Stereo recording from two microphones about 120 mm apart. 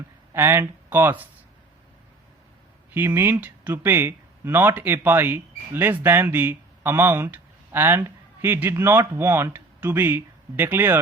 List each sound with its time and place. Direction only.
0.3 s speech: 20° right (ahead or behind)
2.9 s speech: 15° right (ahead or behind)